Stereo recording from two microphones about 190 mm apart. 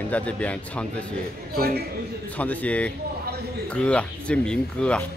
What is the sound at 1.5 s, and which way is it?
Speech, 50° right (ahead or behind).